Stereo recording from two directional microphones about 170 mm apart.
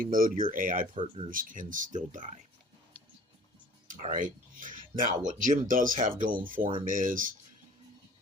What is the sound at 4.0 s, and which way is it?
Speech, 50° right (ahead or behind).